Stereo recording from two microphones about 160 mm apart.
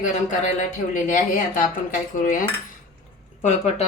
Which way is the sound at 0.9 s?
55° left (ahead or behind).